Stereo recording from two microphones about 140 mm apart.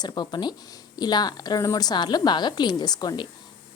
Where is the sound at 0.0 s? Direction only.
30° left (ahead or behind).